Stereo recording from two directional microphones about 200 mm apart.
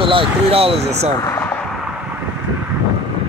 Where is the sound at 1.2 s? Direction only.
15° left (ahead or behind).